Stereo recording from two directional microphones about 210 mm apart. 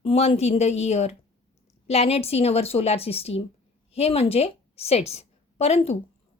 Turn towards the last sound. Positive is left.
turn(degrees=30)  # may be behind; listen again after turning